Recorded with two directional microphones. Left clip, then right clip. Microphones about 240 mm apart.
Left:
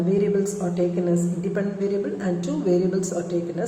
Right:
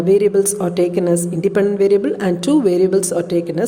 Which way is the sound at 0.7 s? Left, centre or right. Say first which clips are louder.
Right 8 dB; right.